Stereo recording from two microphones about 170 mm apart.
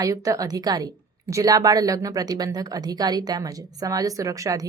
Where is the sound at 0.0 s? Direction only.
20° right (ahead or behind).